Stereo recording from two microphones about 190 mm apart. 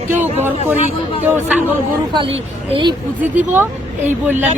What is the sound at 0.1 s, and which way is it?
Speech, 10° right (ahead or behind).